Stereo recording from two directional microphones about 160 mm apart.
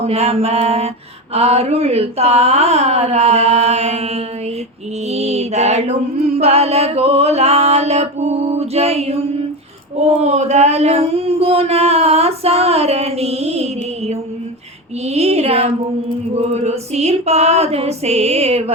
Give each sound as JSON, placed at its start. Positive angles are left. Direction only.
{"t": 0.0, "sound": "mantra", "side_deg": -40}
{"t": 15.0, "sound": "mantra", "side_deg": -40}
{"t": 16.3, "sound": "female singing", "side_deg": -45}